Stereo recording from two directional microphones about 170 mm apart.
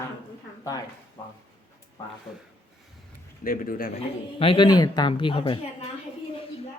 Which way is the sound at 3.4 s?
55° left (ahead or behind).